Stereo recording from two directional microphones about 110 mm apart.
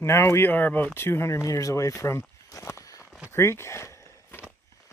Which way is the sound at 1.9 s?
25° left (ahead or behind).